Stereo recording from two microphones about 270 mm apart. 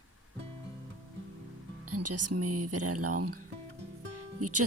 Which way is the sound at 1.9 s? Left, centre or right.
Right.